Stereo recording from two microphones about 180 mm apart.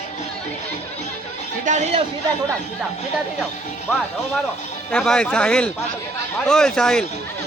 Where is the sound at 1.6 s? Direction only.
40° right (ahead or behind).